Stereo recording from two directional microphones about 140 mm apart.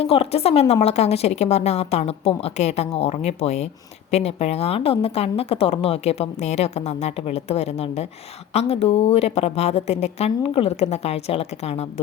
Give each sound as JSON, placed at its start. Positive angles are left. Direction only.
{"t": 0.0, "sound": "speech", "side_deg": 45}